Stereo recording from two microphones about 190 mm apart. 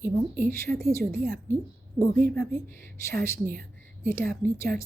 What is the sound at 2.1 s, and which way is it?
Speech, 5° left (ahead or behind).